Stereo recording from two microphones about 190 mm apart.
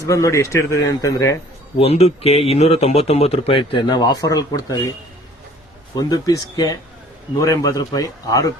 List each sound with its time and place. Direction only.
0.0 s speech: 15° left (ahead or behind)
1.8 s speech: 30° left (ahead or behind)